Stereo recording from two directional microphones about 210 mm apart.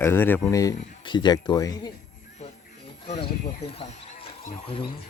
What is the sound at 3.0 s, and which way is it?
Speech, 30° left (ahead or behind).